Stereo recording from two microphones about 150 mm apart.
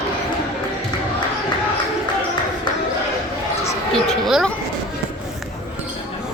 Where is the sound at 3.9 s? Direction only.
Centre (ahead or behind).